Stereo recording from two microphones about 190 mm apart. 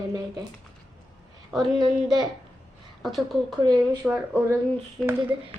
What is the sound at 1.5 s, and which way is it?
Speech, centre (ahead or behind).